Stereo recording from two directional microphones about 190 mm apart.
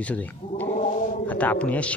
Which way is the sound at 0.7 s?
40° left (ahead or behind).